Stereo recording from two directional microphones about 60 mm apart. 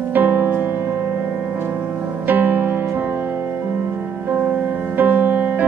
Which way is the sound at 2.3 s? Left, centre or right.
Right.